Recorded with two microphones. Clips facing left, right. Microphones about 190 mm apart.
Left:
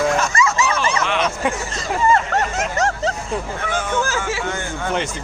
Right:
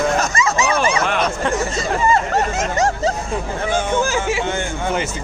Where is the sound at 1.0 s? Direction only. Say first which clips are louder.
Right 1 dB; 45° right (ahead or behind).